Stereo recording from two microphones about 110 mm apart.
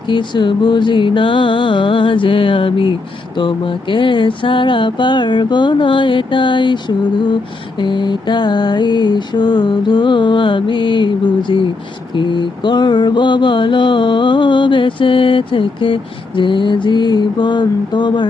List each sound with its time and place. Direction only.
0.1 s mantra: 45° left (ahead or behind)